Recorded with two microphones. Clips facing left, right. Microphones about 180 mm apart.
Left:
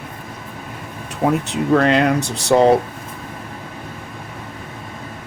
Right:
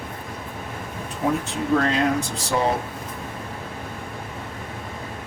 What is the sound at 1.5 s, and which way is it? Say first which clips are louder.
Speech: left 6 dB; 75° left (ahead or behind).